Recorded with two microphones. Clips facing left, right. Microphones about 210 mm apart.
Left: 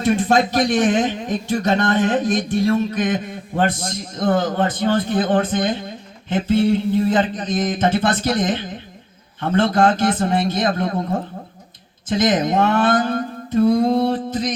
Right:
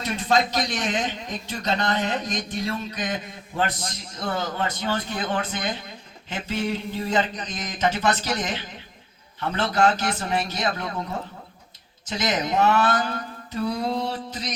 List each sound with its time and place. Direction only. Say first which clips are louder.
0.0 s a man's voice: left 7 dB; 50° left (ahead or behind)
7.1 s a man's voice: left 6 dB; 50° left (ahead or behind)